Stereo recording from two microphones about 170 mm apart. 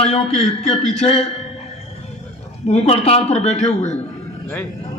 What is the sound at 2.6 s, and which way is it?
Speech, 40° left (ahead or behind).